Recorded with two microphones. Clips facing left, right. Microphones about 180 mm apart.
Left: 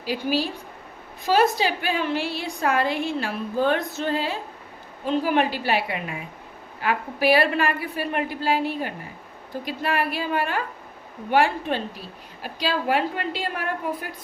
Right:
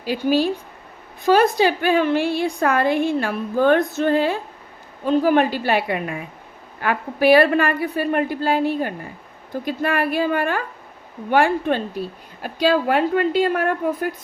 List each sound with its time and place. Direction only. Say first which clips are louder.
0.0 s a woman's voice: right 6 dB; 50° right (ahead or behind)